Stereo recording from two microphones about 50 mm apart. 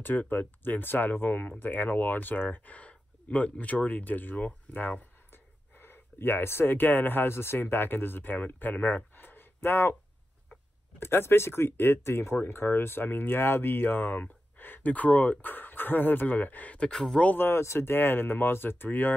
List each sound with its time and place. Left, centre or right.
0.0 s speech: left
11.0 s speech: left
12.4 s speech: left
16.9 s speech: centre
17.4 s speech: left